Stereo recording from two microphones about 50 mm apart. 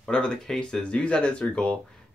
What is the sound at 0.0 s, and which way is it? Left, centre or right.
Speech, centre.